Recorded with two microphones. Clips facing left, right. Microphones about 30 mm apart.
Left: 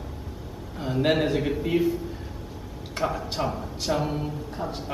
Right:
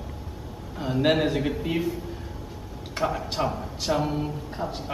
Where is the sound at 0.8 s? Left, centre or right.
Centre.